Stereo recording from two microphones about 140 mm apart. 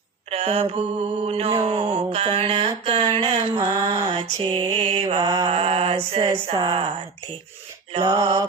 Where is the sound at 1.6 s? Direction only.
40° right (ahead or behind).